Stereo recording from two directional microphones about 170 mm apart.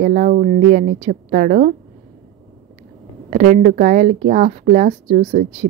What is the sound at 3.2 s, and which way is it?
A woman's voice, 50° right (ahead or behind).